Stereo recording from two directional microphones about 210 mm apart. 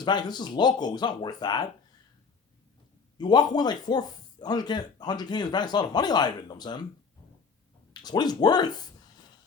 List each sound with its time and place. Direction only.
0.0 s speech: 20° left (ahead or behind)
3.2 s speech: 20° left (ahead or behind)
8.0 s speech: 20° left (ahead or behind)